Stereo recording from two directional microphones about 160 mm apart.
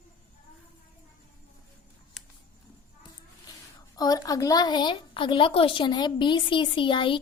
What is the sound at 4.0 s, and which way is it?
A woman's voice, 25° left (ahead or behind).